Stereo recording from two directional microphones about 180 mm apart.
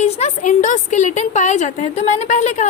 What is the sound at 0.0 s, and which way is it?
A woman's voice, 40° left (ahead or behind).